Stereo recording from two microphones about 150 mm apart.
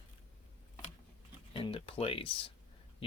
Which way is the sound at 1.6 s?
35° left (ahead or behind).